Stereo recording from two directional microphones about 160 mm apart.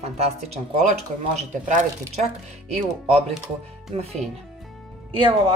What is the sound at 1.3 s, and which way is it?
Speech, 50° right (ahead or behind).